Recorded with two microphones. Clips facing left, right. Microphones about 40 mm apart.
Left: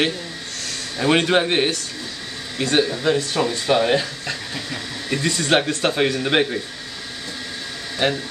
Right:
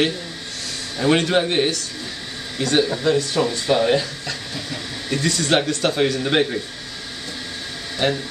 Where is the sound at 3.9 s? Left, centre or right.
Left.